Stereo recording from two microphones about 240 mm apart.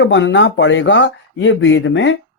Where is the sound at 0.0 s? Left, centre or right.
Left.